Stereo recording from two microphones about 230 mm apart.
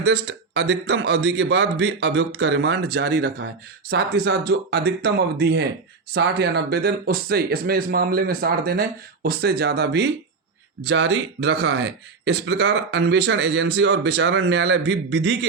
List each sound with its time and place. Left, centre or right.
0.0 s speech: right